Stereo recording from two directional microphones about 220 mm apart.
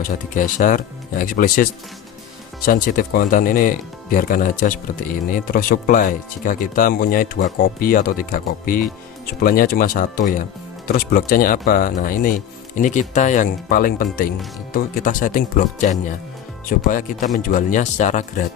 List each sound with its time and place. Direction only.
0.3 s speech: 40° left (ahead or behind)
2.6 s speech: 40° left (ahead or behind)